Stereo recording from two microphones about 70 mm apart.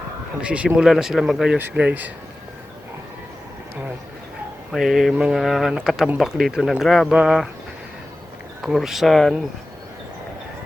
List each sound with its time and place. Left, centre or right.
0.4 s speech: centre
1.7 s speech: right
4.7 s speech: centre
8.6 s speech: centre